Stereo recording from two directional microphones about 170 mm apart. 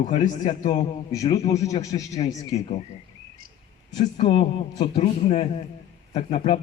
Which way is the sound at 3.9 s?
40° left (ahead or behind).